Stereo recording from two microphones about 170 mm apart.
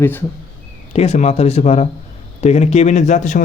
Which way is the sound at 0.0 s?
15° left (ahead or behind).